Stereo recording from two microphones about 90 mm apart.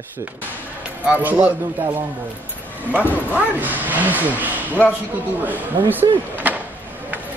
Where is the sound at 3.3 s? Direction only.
20° right (ahead or behind).